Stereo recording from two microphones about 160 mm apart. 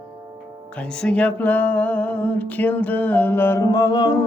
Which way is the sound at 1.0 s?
5° left (ahead or behind).